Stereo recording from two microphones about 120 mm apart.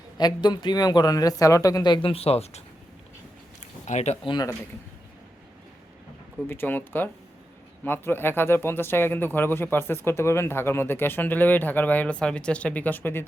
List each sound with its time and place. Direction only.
0.2 s speech: 35° left (ahead or behind); by 2.6 s 60° left (ahead or behind)
3.8 s speech: 70° left (ahead or behind)
4.2 s speech: 40° left (ahead or behind)
6.5 s speech: 15° left (ahead or behind)